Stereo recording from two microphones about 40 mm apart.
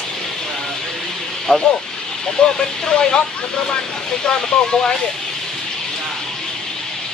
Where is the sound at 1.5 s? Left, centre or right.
Centre.